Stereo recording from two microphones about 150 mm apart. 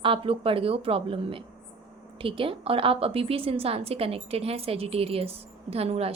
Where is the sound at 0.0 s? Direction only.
35° right (ahead or behind).